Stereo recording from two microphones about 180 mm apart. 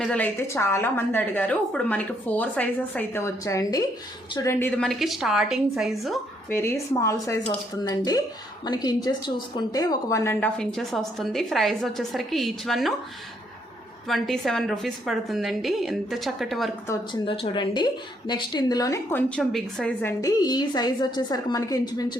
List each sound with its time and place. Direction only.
0.0 s a woman's voice: 5° left (ahead or behind)
6.5 s a woman's voice: 15° left (ahead or behind)
14.1 s a woman's voice: centre (ahead or behind)
16.8 s a woman's voice: 15° left (ahead or behind)
17.2 s a woman's voice: 30° left (ahead or behind)
19.3 s a woman's voice: 5° left (ahead or behind); by 22.2 s 20° left (ahead or behind)